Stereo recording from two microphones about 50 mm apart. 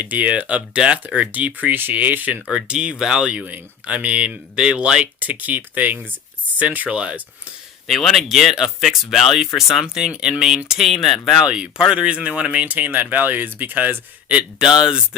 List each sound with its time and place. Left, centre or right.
0.0 s speech: right
2.5 s speech: centre
3.2 s speech: right
4.5 s speech: centre
5.2 s speech: right
7.9 s speech: centre
9.8 s speech: centre
10.7 s speech: centre
11.4 s speech: centre; by 14.0 s right
14.6 s speech: centre